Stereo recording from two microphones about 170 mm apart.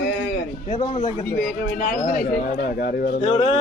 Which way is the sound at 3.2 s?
35° left (ahead or behind).